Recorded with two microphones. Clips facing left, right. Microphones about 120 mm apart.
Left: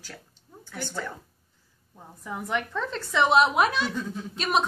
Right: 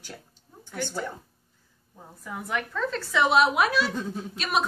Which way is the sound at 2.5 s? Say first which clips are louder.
Right 1 dB; 25° left (ahead or behind).